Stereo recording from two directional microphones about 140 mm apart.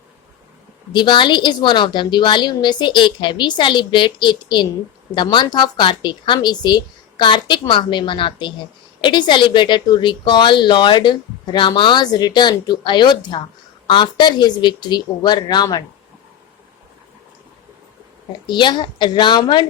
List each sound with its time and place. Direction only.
0.9 s a woman's voice: 35° left (ahead or behind)
18.4 s a woman's voice: 35° left (ahead or behind)